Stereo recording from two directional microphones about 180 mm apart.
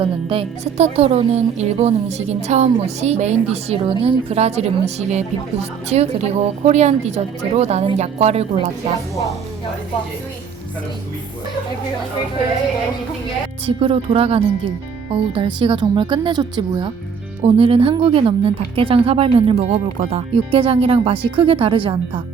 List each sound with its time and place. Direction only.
0.0 s speech: 30° right (ahead or behind)
13.7 s speech: 30° right (ahead or behind)